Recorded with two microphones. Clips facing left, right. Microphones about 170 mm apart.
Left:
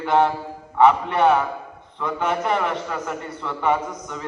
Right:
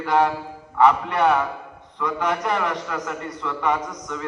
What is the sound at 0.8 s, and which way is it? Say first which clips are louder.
A man's voice: left 2 dB; centre (ahead or behind).